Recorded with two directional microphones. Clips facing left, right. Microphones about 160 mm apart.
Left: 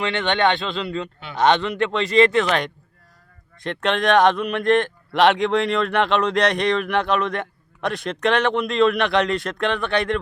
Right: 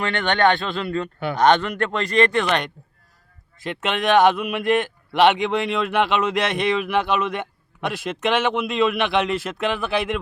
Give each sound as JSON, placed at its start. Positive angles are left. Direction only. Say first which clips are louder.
{"t": 0.0, "sound": "speech", "louder": "right 1 dB", "side_deg": 0}